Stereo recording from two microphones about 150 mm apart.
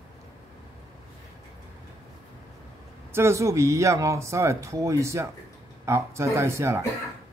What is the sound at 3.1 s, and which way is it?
Speech, 15° right (ahead or behind).